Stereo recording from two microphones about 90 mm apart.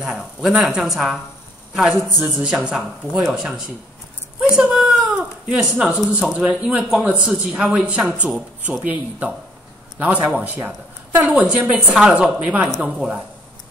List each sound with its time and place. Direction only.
0.0 s a man's voice: 5° right (ahead or behind)